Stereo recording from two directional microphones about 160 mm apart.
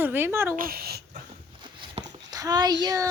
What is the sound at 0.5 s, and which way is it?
Speech, 65° right (ahead or behind).